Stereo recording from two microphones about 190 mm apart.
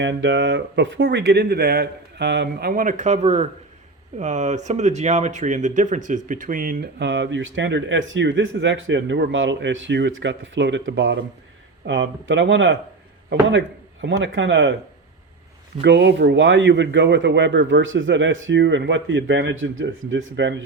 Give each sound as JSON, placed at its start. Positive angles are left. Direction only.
{"t": 0.0, "sound": "speech", "side_deg": -70}
{"t": 11.9, "sound": "speech", "side_deg": -75}
{"t": 15.8, "sound": "speech", "side_deg": -65}